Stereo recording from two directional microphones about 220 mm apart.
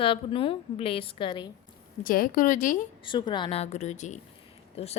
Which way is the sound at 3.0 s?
20° left (ahead or behind).